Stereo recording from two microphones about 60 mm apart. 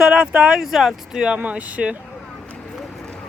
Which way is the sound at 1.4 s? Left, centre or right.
Right.